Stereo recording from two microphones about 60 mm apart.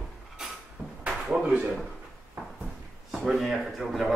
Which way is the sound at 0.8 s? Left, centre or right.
Centre.